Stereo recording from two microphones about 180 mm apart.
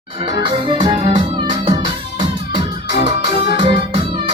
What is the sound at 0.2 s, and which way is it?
Music, 25° right (ahead or behind).